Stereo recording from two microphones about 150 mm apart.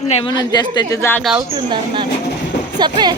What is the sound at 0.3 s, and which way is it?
Speech, 30° left (ahead or behind).